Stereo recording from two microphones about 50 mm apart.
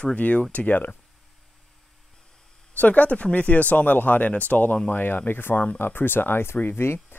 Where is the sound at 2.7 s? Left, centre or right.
Left.